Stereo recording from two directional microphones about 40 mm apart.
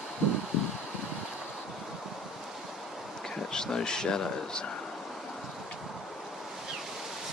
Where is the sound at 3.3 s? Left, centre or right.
Centre.